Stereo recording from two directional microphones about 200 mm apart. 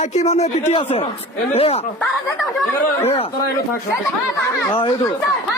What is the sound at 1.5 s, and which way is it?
Speech, 30° left (ahead or behind).